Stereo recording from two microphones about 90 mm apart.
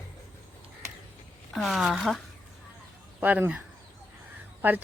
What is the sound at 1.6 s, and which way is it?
Speech, centre (ahead or behind).